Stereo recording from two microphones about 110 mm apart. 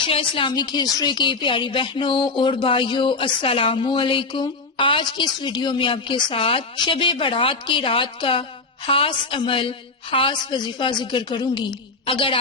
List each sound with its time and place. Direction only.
0.0 s speech: 50° left (ahead or behind)